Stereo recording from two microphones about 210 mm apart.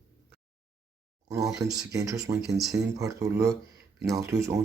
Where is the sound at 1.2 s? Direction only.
15° right (ahead or behind).